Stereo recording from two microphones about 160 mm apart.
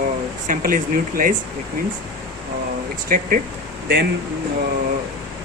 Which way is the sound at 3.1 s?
60° right (ahead or behind).